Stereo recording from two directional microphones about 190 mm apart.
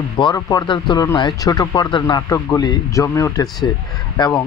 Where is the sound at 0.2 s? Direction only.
20° left (ahead or behind).